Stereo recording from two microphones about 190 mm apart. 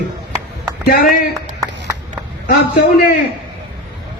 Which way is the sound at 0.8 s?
45° left (ahead or behind).